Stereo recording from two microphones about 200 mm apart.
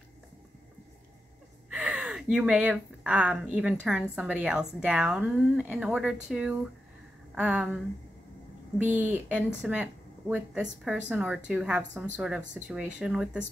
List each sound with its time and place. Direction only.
1.7 s speech: 5° right (ahead or behind)